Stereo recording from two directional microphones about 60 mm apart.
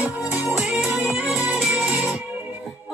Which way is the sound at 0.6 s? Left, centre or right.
Centre.